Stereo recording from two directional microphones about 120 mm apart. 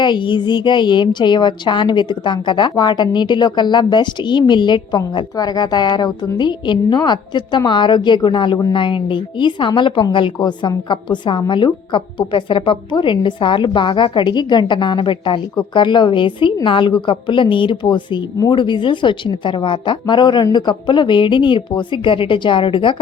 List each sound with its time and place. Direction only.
0.0 s a woman's voice: 40° left (ahead or behind)